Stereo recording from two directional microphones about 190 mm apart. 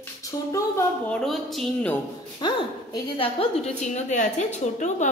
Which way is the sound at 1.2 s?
Centre (ahead or behind).